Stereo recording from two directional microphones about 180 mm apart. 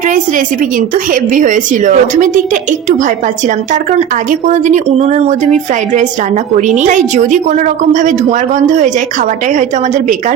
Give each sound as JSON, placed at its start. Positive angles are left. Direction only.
{"t": 0.0, "sound": "a woman's voice", "side_deg": -45}
{"t": 9.5, "sound": "a woman's voice", "side_deg": -40}